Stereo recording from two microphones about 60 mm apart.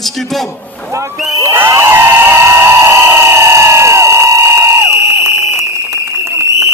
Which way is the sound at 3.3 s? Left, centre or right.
Right.